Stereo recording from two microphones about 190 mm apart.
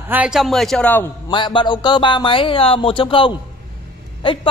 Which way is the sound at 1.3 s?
25° left (ahead or behind).